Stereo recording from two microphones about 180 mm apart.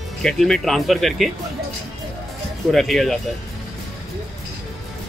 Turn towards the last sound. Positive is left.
turn(degrees=0)  # may be behind; listen again after turning